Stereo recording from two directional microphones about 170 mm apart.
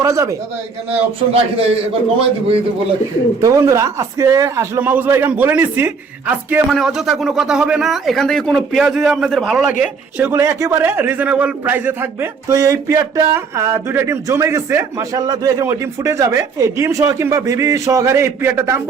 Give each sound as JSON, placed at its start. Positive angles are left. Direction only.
{"t": 0.0, "sound": "speech", "side_deg": -20}
{"t": 0.9, "sound": "a man's voice", "side_deg": -35}
{"t": 3.4, "sound": "speech", "side_deg": -20}